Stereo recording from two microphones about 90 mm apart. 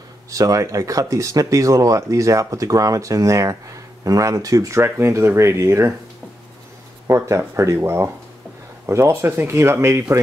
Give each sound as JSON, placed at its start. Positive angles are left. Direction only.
{"t": 0.3, "sound": "speech", "side_deg": -40}
{"t": 7.1, "sound": "speech", "side_deg": -35}